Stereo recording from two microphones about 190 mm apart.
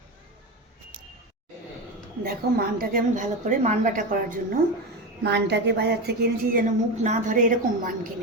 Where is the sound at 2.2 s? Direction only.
50° right (ahead or behind).